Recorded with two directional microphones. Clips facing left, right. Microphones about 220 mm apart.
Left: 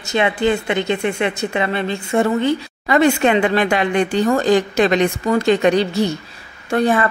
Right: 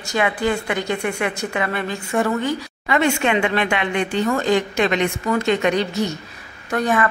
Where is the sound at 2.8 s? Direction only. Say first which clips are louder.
Left 5 dB; 40° left (ahead or behind).